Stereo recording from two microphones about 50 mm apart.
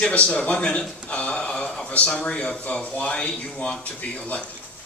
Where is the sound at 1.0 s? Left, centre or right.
Left.